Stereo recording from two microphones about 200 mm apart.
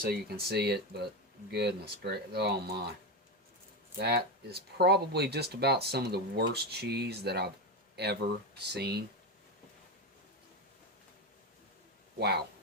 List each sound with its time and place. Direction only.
0.0 s speech: 50° right (ahead or behind)
3.9 s speech: 55° right (ahead or behind)